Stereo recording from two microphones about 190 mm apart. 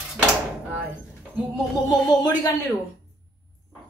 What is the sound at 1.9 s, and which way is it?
Speech, 20° left (ahead or behind).